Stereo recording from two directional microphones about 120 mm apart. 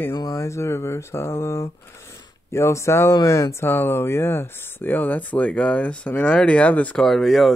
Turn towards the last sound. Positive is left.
turn(degrees=0)  # may be behind; listen again after turning